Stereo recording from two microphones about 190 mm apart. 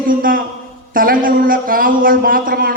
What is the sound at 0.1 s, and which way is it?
A man's voice, 45° right (ahead or behind).